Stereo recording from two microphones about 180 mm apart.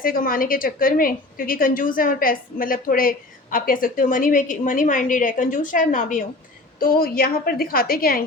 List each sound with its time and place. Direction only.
0.0 s a woman's voice: 55° left (ahead or behind)